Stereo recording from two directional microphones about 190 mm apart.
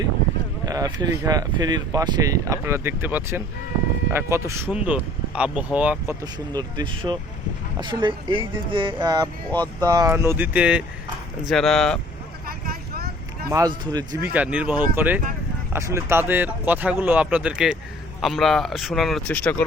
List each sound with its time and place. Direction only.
0.6 s speech: 20° right (ahead or behind)
6.5 s speech: 20° right (ahead or behind)
9.2 s speech: 10° left (ahead or behind)
9.8 s speech: 20° right (ahead or behind); by 11.9 s centre (ahead or behind)
12.5 s vehicle: 50° right (ahead or behind)
13.5 s speech: 20° right (ahead or behind)
14.3 s speech: 5° right (ahead or behind)